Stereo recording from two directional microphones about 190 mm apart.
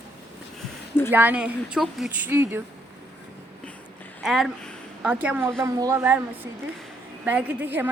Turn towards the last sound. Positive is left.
turn(degrees=-10)  # may be behind; listen again after turning